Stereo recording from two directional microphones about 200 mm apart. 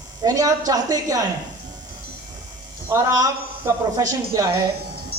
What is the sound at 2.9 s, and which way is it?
A man's voice, 20° right (ahead or behind).